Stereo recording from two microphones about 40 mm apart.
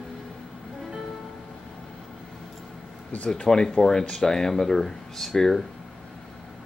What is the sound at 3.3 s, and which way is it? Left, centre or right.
Speech, centre.